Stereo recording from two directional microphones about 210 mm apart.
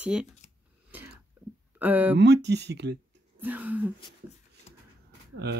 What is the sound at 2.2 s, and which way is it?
Speech, 55° right (ahead or behind).